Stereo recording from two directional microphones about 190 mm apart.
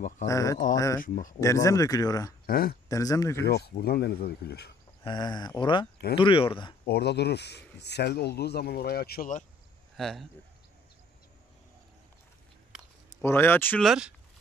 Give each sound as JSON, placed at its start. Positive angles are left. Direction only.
{"t": 0.3, "sound": "speech", "side_deg": 15}
{"t": 1.0, "sound": "speech", "side_deg": 45}
{"t": 1.4, "sound": "speech", "side_deg": 15}
{"t": 2.4, "sound": "speech", "side_deg": 50}
{"t": 2.9, "sound": "speech", "side_deg": 20}
{"t": 3.4, "sound": "speech", "side_deg": 55}
{"t": 5.0, "sound": "speech", "side_deg": 20}
{"t": 6.9, "sound": "speech", "side_deg": 60}
{"t": 9.9, "sound": "speech", "side_deg": 0}
{"t": 13.2, "sound": "speech", "side_deg": 10}